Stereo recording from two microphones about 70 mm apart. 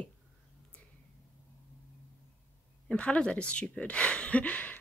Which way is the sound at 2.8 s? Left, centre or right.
Centre.